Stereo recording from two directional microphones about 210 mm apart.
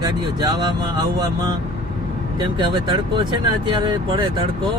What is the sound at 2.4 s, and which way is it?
Speech, 20° right (ahead or behind).